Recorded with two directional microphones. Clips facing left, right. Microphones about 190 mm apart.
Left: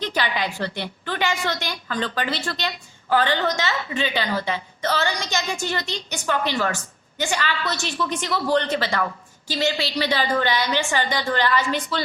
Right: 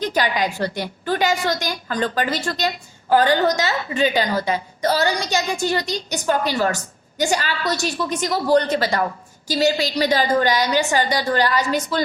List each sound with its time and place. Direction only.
0.0 s a woman's voice: 45° right (ahead or behind)